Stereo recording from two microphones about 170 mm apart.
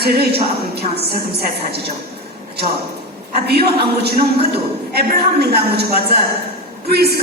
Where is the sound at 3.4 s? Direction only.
70° right (ahead or behind).